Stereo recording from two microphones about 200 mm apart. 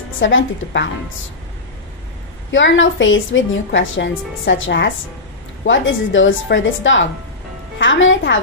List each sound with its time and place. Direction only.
0.2 s a woman's voice: 70° left (ahead or behind)
2.5 s a woman's voice: 70° left (ahead or behind)